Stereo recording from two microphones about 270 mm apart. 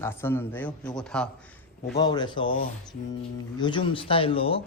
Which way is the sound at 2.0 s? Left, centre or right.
Centre.